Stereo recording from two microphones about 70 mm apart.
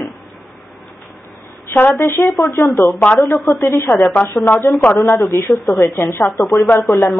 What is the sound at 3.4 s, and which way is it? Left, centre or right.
Speech, left.